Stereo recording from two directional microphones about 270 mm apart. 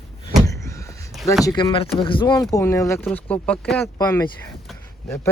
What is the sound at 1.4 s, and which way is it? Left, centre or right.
Speech, centre.